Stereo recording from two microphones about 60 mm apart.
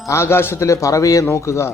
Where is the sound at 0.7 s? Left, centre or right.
Left.